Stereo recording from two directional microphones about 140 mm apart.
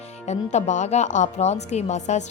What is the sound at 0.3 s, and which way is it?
A woman's voice, 55° left (ahead or behind).